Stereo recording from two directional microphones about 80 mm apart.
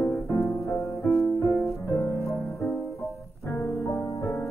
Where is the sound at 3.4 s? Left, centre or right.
Left.